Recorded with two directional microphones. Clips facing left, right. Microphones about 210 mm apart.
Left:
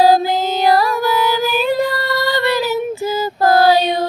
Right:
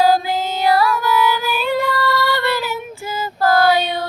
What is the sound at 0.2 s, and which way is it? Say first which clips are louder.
Music: left 4 dB; 40° left (ahead or behind).